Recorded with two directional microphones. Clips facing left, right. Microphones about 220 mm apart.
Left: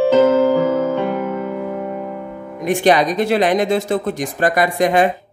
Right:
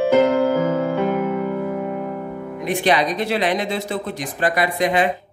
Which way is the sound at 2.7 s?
45° left (ahead or behind).